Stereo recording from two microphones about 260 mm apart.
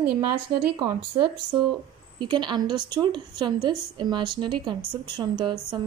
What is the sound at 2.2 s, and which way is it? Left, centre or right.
Speech, centre.